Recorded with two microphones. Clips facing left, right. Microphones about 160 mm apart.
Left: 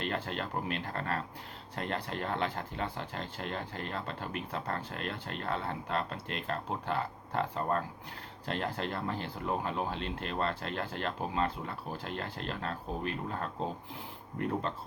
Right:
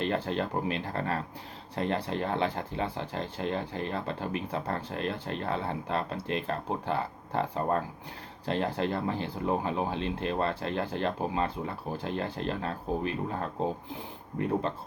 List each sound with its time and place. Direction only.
0.1 s speech: 20° right (ahead or behind)